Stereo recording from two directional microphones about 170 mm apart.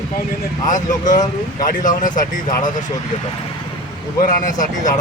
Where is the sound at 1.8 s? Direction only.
50° left (ahead or behind).